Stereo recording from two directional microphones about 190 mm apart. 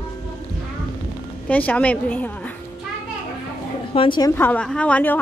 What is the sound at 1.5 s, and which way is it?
A woman's voice, 10° left (ahead or behind).